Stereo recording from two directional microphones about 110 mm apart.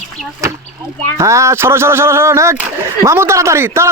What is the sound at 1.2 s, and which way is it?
Speech, 25° right (ahead or behind).